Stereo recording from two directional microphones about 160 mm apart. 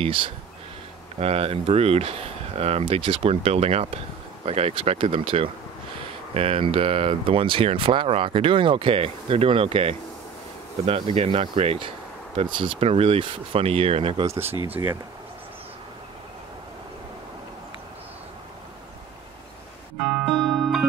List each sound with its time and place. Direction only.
0.0 s speech: 35° right (ahead or behind)
14.3 s speech: 15° right (ahead or behind)
20.0 s music: centre (ahead or behind)